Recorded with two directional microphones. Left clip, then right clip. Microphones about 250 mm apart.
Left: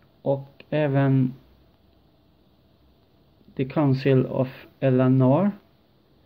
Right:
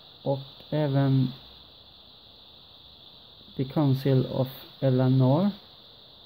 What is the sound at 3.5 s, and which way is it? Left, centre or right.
Speech, centre.